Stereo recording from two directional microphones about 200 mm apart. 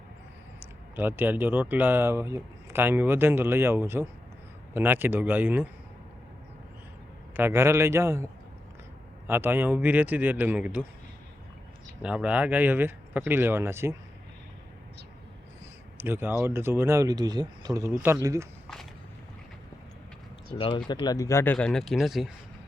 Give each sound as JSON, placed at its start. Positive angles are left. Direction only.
{"t": 0.9, "sound": "speech", "side_deg": -10}
{"t": 7.3, "sound": "speech", "side_deg": -10}
{"t": 12.0, "sound": "speech", "side_deg": -5}
{"t": 16.0, "sound": "speech", "side_deg": -10}
{"t": 20.5, "sound": "speech", "side_deg": 25}